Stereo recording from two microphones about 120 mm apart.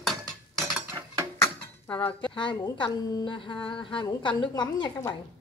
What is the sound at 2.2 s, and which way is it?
A woman's voice, 40° left (ahead or behind).